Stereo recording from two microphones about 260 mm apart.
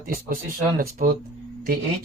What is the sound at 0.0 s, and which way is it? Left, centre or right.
Speech, right.